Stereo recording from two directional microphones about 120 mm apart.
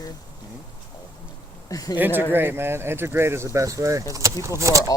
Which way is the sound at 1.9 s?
15° right (ahead or behind).